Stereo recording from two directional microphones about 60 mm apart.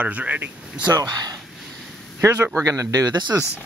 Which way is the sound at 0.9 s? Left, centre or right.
Right.